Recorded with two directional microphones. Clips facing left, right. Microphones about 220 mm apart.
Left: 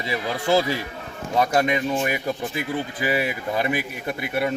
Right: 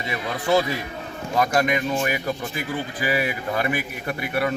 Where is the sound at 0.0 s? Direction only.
30° left (ahead or behind).